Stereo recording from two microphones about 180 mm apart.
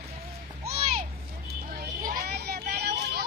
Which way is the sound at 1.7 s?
50° right (ahead or behind).